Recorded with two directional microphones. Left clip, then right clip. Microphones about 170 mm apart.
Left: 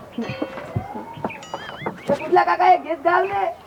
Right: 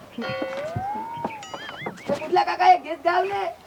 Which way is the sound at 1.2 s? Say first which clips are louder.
Left 2 dB; centre (ahead or behind).